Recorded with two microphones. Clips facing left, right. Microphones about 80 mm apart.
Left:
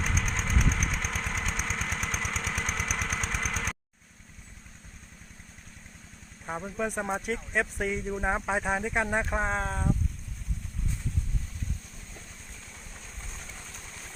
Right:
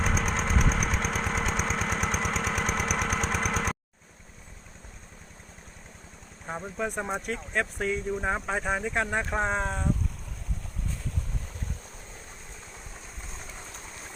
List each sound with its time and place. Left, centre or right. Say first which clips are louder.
0.0 s lawn mower: right 4 dB; right
1.8 s engine: right 5 dB; right
2.2 s lawn mower: right 4 dB; right
3.0 s vehicle: right 4 dB; right
3.4 s engine: right 5 dB; right
6.4 s speech: even; centre
13.5 s vehicle: right 2 dB; right